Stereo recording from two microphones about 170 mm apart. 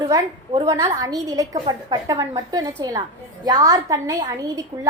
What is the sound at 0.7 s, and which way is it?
A woman's voice, 20° right (ahead or behind).